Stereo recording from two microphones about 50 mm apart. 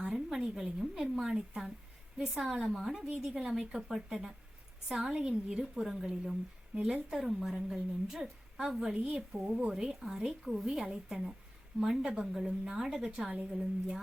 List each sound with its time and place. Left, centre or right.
0.0 s a woman's voice: centre
4.9 s a woman's voice: centre
6.7 s a woman's voice: right
7.1 s a woman's voice: centre